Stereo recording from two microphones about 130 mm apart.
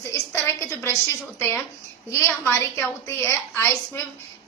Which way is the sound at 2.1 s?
20° left (ahead or behind).